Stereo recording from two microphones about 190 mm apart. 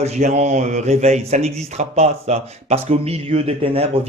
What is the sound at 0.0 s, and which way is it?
Speech, 35° right (ahead or behind).